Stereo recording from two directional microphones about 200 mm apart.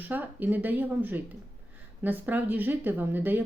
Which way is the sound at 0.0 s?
10° right (ahead or behind).